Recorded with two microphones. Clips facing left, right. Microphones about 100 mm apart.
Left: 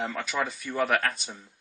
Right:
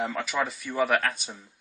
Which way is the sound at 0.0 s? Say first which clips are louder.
Right 2 dB; 5° right (ahead or behind).